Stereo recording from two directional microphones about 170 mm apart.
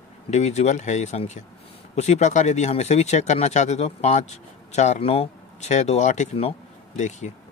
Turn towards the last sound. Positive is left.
turn(degrees=45)  # may be behind; listen again after turning